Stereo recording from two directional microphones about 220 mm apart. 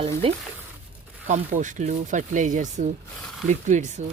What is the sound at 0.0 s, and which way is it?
Speech, 25° right (ahead or behind).